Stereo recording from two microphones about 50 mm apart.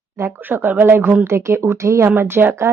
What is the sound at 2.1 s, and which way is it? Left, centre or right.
Speech, right.